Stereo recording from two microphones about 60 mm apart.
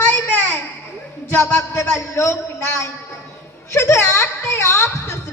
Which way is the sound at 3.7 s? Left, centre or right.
Left.